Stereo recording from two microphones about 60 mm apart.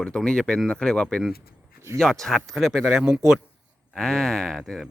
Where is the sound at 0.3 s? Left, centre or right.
Centre.